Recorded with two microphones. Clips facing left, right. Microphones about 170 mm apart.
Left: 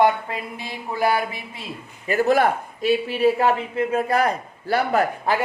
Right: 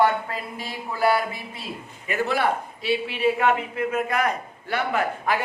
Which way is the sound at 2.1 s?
45° left (ahead or behind).